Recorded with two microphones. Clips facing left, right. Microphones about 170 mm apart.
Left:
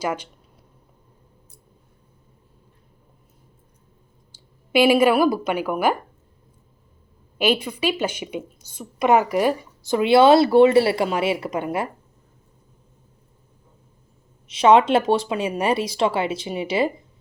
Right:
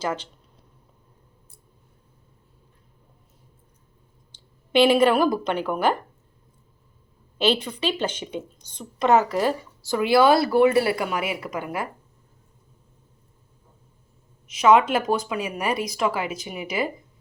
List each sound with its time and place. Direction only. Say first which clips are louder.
0.0 s speech: left 2 dB; 10° left (ahead or behind)
4.3 s speech: left 2 dB; 10° left (ahead or behind)
7.3 s a woman's voice: left 1 dB; 10° left (ahead or behind)
14.4 s a woman's voice: left 2 dB; 30° left (ahead or behind)